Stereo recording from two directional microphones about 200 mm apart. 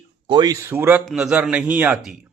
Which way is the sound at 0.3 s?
20° right (ahead or behind).